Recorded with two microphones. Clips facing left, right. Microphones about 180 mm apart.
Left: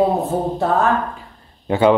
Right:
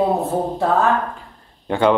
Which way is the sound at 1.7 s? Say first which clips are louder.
Left 2 dB; 5° left (ahead or behind).